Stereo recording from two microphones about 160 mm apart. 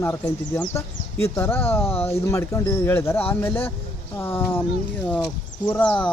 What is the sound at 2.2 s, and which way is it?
Speech, 20° left (ahead or behind).